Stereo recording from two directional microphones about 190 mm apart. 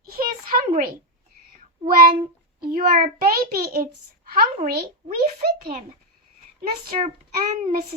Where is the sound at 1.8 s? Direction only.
50° right (ahead or behind).